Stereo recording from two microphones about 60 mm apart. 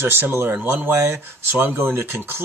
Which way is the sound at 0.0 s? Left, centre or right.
Right.